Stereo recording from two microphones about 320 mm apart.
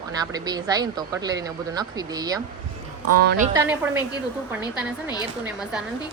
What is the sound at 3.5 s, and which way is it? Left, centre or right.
Speech, centre.